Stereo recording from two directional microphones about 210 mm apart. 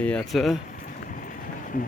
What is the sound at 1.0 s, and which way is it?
Run, 40° left (ahead or behind).